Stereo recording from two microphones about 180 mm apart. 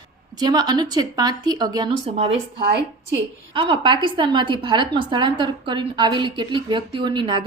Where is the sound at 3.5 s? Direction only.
30° right (ahead or behind).